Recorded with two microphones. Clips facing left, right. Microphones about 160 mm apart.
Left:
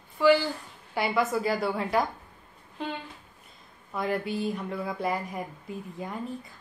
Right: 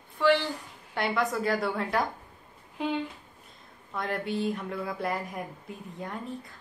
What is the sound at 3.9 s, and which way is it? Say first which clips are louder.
Speech: left 2 dB; 5° left (ahead or behind).